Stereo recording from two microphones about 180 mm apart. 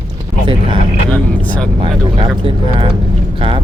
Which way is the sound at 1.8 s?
30° right (ahead or behind).